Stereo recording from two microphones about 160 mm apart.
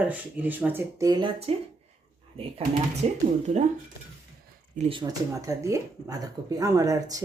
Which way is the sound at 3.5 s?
50° right (ahead or behind).